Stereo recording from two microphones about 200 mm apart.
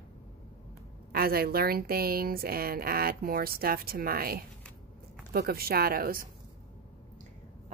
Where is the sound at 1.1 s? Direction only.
50° right (ahead or behind).